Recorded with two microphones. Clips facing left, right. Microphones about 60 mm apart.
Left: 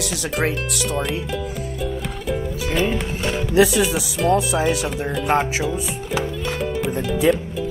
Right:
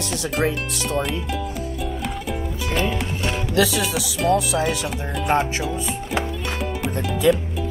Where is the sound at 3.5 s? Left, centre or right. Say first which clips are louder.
Left 5 dB; left.